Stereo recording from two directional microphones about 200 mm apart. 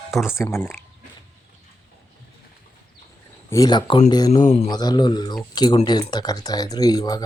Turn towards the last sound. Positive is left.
turn(degrees=20)  # may be behind; listen again after turning